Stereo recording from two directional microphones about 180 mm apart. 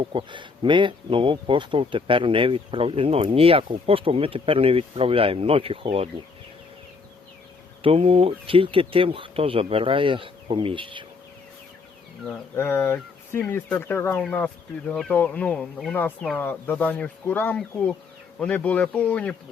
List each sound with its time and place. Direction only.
0.1 s speech: 25° right (ahead or behind)
7.8 s speech: 30° right (ahead or behind)
12.3 s speech: 10° left (ahead or behind)